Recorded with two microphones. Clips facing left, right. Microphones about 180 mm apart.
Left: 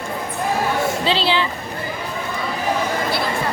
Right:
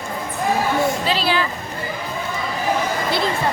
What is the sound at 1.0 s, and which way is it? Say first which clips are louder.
Speech: left 1 dB; 25° left (ahead or behind).